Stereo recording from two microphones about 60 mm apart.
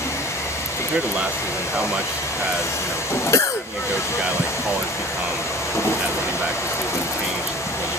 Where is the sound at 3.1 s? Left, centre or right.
Left.